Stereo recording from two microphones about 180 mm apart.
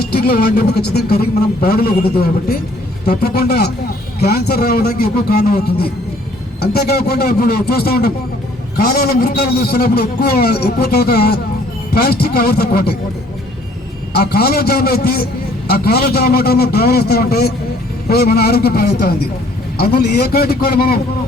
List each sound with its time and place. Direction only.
0.2 s a man's voice: 55° left (ahead or behind)
14.1 s a man's voice: 60° left (ahead or behind)